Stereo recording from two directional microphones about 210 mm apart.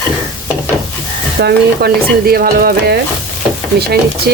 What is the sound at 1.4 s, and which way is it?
Speech, 45° right (ahead or behind).